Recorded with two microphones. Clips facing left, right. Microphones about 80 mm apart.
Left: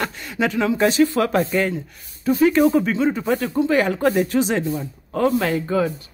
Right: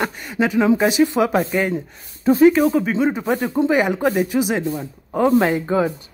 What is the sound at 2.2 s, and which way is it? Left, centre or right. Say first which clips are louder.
Speech: right 4 dB; right.